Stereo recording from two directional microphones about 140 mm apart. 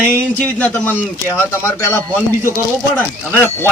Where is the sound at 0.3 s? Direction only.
10° left (ahead or behind).